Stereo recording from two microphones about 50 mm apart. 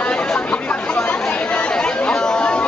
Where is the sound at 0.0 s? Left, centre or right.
Left.